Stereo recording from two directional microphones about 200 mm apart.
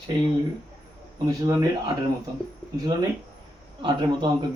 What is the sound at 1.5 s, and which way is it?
Speech, 15° right (ahead or behind).